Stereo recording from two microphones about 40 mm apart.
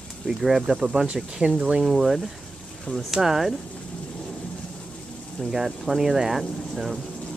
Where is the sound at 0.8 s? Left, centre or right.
Right.